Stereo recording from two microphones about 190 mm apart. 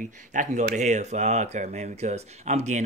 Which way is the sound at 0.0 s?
40° right (ahead or behind).